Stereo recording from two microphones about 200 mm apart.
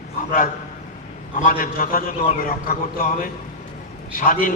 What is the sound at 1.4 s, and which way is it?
Speech, 40° left (ahead or behind).